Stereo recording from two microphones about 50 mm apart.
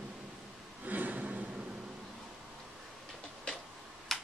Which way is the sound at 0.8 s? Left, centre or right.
Right.